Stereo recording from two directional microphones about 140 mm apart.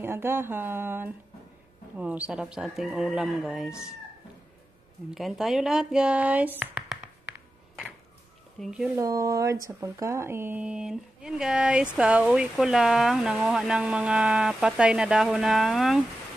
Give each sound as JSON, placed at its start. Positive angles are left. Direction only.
{"t": 0.0, "sound": "speech", "side_deg": -15}
{"t": 5.1, "sound": "speech", "side_deg": 0}
{"t": 6.6, "sound": "a sound", "side_deg": 0}
{"t": 8.5, "sound": "speech", "side_deg": -5}
{"t": 8.9, "sound": "speech", "side_deg": -25}